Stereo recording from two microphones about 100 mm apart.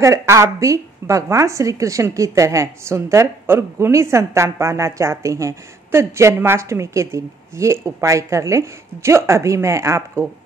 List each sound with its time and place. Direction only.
0.0 s a woman's voice: 30° right (ahead or behind)